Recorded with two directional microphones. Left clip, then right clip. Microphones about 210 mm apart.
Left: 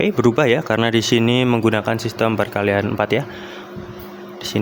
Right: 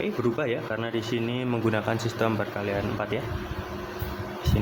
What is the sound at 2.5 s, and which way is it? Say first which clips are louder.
Speech: left 10 dB; 55° left (ahead or behind).